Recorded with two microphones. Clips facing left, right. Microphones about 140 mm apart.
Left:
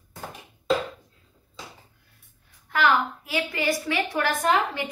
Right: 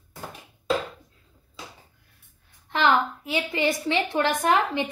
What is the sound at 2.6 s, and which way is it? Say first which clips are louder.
A woman's voice: right 1 dB; 25° right (ahead or behind).